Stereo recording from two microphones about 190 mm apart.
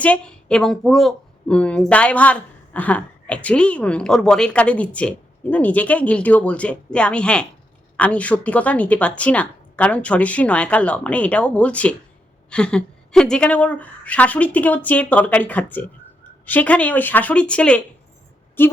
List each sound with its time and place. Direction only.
0.0 s a woman's voice: 5° left (ahead or behind)